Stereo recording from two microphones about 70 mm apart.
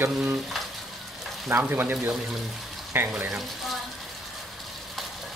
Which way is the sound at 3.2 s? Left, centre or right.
Centre.